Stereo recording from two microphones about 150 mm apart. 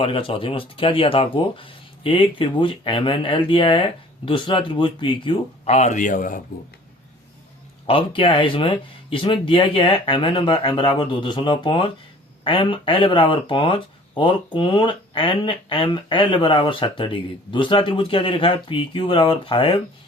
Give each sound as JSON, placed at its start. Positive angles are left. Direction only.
{"t": 0.0, "sound": "speech", "side_deg": 35}
{"t": 7.9, "sound": "speech", "side_deg": 35}